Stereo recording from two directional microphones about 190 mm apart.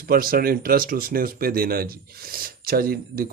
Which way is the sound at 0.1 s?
50° right (ahead or behind).